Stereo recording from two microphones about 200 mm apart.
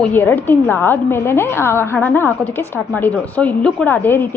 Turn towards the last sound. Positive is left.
turn(degrees=10)  # may be behind; listen again after turning